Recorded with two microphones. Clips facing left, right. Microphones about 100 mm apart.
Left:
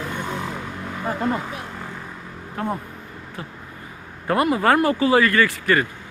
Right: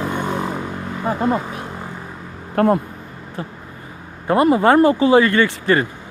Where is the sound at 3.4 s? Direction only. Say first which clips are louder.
Right 7 dB; 30° right (ahead or behind).